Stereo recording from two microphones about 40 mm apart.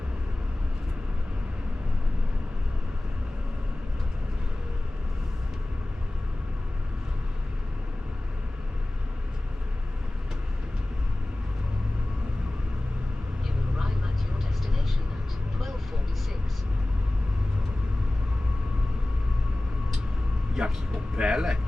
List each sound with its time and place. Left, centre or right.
20.6 s vehicle: centre
21.2 s speech: centre